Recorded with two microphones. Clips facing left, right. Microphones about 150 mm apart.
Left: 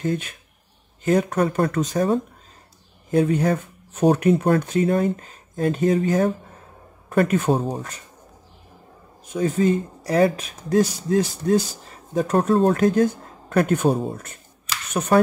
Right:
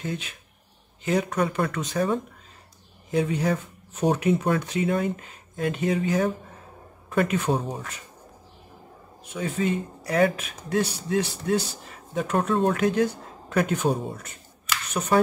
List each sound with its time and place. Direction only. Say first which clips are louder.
0.0 s speech: left 7 dB; 50° left (ahead or behind)
9.2 s speech: left 7 dB; 45° left (ahead or behind)